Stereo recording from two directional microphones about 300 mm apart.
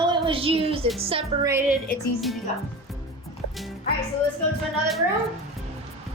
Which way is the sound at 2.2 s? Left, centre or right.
Centre.